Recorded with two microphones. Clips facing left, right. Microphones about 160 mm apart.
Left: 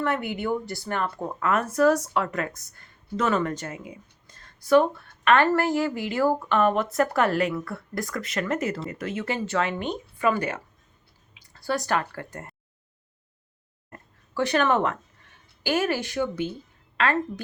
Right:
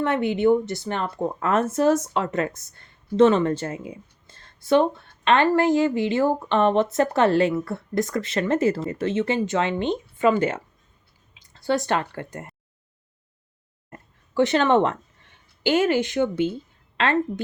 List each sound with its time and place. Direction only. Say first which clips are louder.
0.0 s speech: right 7 dB; 25° right (ahead or behind)
14.3 s speech: right 4 dB; 20° right (ahead or behind)